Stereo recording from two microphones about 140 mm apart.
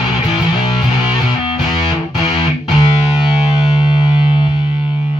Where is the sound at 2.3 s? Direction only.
30° left (ahead or behind).